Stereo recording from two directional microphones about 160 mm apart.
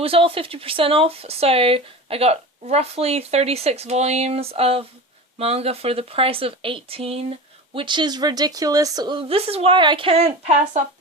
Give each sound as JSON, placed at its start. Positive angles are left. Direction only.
{"t": 0.0, "sound": "speech", "side_deg": -35}